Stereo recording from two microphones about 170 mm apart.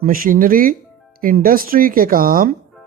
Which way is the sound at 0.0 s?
55° right (ahead or behind).